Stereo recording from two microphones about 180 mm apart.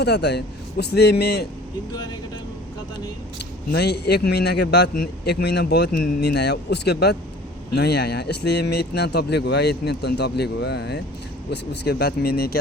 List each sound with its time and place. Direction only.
0.0 s a man's voice: 70° left (ahead or behind)
3.7 s a man's voice: 65° left (ahead or behind)